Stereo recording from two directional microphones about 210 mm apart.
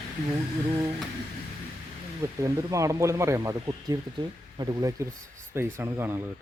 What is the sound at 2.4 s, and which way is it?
Speech, 15° right (ahead or behind).